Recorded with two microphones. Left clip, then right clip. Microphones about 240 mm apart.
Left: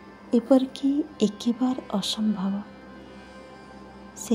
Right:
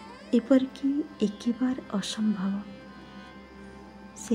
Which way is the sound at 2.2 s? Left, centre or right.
Centre.